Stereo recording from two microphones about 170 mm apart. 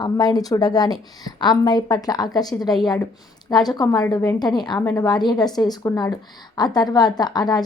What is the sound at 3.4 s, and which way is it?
A woman's voice, 25° left (ahead or behind).